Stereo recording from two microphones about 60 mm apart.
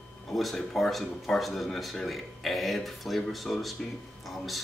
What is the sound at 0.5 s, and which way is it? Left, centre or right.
Speech, centre.